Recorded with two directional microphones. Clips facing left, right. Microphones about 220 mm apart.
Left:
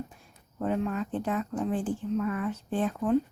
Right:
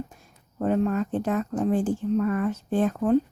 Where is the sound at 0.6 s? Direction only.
45° right (ahead or behind).